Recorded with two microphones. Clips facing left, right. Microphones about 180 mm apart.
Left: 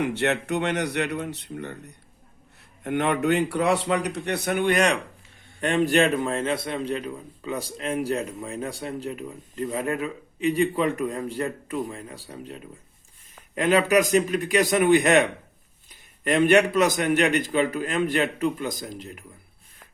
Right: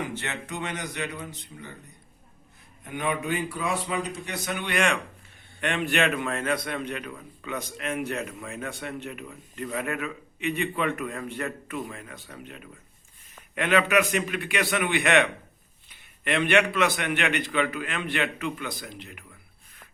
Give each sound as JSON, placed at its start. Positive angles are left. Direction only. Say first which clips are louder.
{"t": 0.0, "sound": "a man's voice", "louder": "left 9 dB", "side_deg": 70}